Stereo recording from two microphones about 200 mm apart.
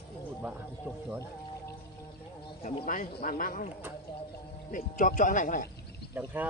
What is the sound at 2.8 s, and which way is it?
Speech, 40° left (ahead or behind).